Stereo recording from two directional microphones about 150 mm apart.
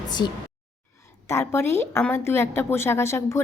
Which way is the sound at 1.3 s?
15° left (ahead or behind).